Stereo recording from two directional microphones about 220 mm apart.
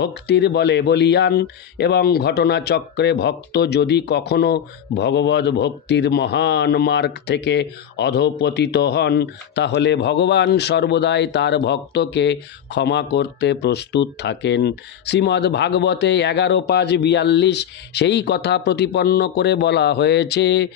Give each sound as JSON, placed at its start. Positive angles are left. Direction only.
{"t": 0.0, "sound": "speech", "side_deg": 50}